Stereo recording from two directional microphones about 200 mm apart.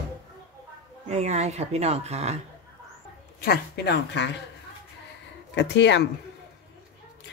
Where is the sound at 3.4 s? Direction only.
55° left (ahead or behind).